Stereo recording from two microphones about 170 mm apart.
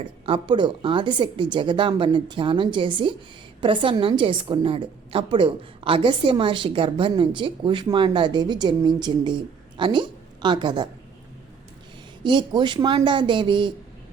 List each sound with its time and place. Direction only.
0.3 s a woman's voice: 30° right (ahead or behind)
12.2 s a woman's voice: 30° right (ahead or behind)